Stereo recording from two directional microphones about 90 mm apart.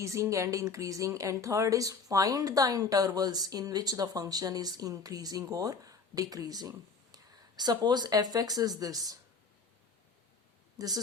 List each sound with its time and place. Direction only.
0.0 s speech: 35° right (ahead or behind)
10.8 s speech: 45° right (ahead or behind)